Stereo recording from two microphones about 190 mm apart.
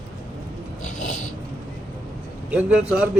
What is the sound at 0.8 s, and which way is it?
Filing, 90° left.